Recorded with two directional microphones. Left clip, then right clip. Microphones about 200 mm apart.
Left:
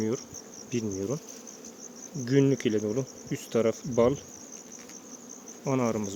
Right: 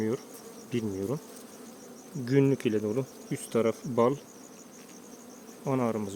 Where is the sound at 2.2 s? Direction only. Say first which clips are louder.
Left 1 dB; centre (ahead or behind).